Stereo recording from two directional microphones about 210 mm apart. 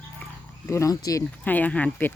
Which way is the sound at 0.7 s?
15° left (ahead or behind).